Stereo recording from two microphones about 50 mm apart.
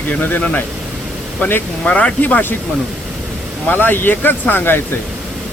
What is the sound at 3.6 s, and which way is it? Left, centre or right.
Speech, left.